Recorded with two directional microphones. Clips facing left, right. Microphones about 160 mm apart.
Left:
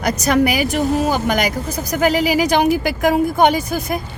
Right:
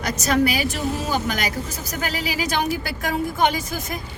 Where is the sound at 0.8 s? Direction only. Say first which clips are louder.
Left 8 dB; 40° left (ahead or behind).